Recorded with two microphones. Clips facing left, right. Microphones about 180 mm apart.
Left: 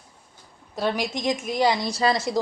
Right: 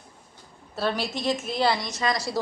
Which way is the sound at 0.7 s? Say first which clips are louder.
Left 2 dB; 15° left (ahead or behind).